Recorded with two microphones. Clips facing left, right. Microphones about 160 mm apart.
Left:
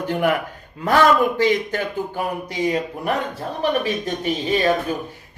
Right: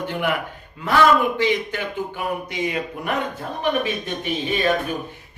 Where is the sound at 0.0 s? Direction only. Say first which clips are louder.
Left 4 dB; 40° left (ahead or behind).